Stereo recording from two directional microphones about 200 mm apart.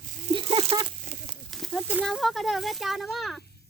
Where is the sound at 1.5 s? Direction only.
Centre (ahead or behind).